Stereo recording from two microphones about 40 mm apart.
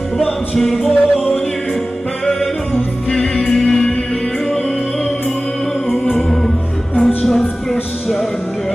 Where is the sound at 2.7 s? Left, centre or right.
Centre.